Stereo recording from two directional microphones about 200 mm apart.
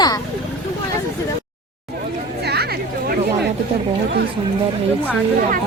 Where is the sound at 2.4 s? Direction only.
55° right (ahead or behind).